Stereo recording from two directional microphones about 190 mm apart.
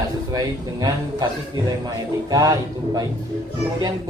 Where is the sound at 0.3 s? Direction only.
20° right (ahead or behind).